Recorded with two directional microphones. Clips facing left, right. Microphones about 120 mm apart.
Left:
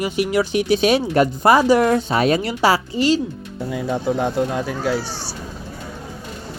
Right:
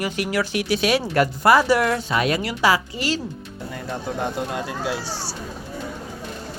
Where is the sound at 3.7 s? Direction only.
5° left (ahead or behind).